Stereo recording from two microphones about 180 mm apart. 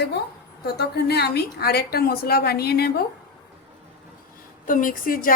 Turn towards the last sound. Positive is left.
turn(degrees=50)  # may be behind; listen again after turning